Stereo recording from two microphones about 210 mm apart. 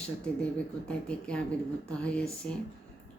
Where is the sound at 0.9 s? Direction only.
5° left (ahead or behind).